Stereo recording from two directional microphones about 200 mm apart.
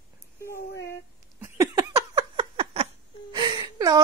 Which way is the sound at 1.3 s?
15° right (ahead or behind).